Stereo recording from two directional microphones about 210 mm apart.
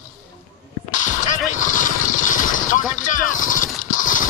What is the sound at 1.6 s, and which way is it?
Vehicle, 40° left (ahead or behind).